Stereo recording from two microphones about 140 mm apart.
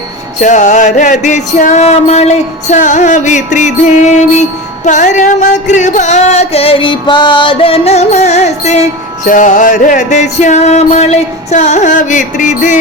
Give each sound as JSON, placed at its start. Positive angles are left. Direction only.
{"t": 0.4, "sound": "music", "side_deg": 60}
{"t": 2.6, "sound": "music", "side_deg": 60}
{"t": 9.2, "sound": "music", "side_deg": 70}